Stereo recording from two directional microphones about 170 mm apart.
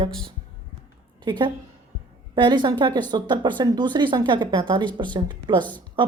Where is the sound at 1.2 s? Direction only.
25° right (ahead or behind).